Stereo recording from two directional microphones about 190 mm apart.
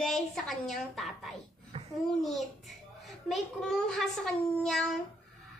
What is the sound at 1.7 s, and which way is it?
Babbling, 30° right (ahead or behind).